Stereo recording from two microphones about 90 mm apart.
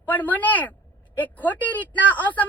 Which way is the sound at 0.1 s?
20° left (ahead or behind).